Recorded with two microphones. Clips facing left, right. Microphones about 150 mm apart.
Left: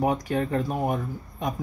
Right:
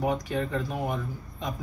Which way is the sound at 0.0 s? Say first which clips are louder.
Left 3 dB; 50° left (ahead or behind).